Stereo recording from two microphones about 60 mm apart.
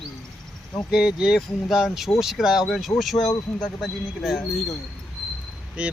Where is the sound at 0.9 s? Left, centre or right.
Centre.